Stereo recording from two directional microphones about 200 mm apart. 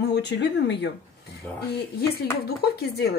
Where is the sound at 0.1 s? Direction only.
60° left (ahead or behind).